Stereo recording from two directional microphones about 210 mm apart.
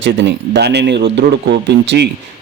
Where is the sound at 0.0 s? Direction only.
55° right (ahead or behind).